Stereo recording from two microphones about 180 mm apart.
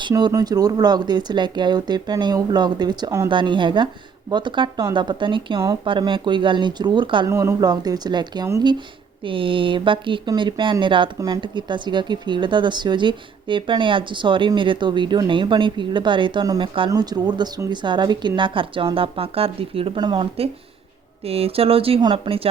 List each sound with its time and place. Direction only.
0.0 s speech: 25° right (ahead or behind)
7.3 s speech: 15° right (ahead or behind); by 22.4 s 30° right (ahead or behind)